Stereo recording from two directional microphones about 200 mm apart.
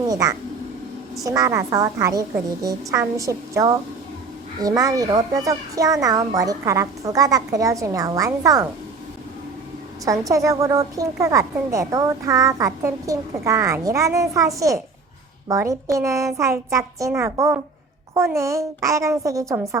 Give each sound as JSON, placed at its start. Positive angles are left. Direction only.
{"t": 0.1, "sound": "a woman's voice", "side_deg": -15}
{"t": 10.1, "sound": "a woman's voice", "side_deg": -15}